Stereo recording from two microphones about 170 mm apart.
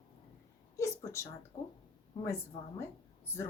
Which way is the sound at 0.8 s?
15° left (ahead or behind).